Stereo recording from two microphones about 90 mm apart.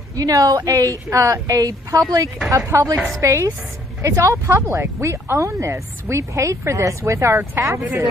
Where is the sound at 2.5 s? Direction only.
30° right (ahead or behind).